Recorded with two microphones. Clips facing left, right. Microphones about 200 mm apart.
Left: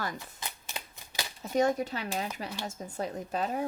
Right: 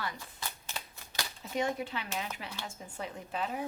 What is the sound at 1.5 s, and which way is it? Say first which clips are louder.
A woman's voice: left 6 dB; 40° left (ahead or behind).